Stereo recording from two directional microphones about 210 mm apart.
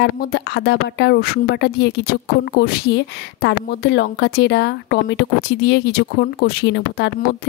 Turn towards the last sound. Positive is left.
turn(degrees=50)  # may be behind; listen again after turning